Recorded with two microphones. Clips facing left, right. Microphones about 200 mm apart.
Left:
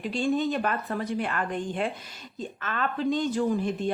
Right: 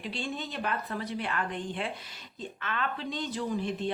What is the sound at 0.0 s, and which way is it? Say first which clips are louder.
A woman's voice: left 10 dB; 45° left (ahead or behind).